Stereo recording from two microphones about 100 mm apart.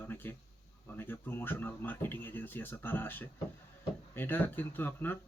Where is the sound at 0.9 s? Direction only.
20° left (ahead or behind).